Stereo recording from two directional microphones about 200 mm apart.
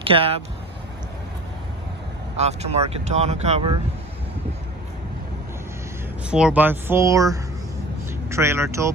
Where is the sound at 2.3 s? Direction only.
35° right (ahead or behind).